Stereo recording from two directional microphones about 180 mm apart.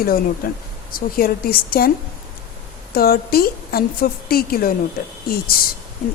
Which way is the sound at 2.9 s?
60° left (ahead or behind).